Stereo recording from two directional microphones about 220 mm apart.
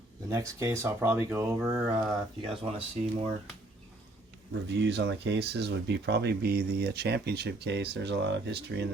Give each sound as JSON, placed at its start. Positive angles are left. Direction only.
{"t": 0.3, "sound": "speech", "side_deg": -15}
{"t": 2.0, "sound": "speech", "side_deg": -25}
{"t": 4.7, "sound": "speech", "side_deg": -50}